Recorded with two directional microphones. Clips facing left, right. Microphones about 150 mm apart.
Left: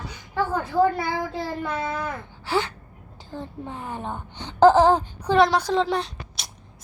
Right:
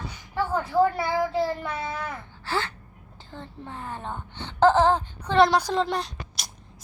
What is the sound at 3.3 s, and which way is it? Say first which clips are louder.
A child's voice: left 5 dB; 15° left (ahead or behind).